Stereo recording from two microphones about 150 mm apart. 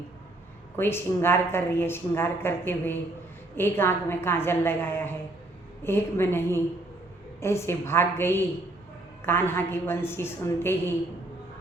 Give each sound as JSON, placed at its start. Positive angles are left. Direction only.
{"t": 0.8, "sound": "a woman's voice", "side_deg": 15}